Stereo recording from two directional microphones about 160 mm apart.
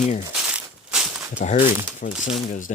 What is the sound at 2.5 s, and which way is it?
Speech, 50° left (ahead or behind).